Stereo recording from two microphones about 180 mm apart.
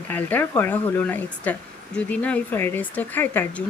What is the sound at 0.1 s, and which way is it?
Speech, 10° left (ahead or behind).